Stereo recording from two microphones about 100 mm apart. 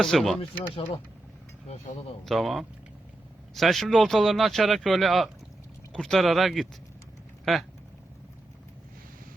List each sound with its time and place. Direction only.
0.0 s speech: centre (ahead or behind)
0.7 s speech: 60° left (ahead or behind)
2.2 s speech: centre (ahead or behind)